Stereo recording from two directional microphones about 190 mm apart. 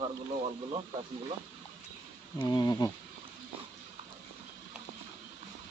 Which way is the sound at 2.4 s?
20° left (ahead or behind).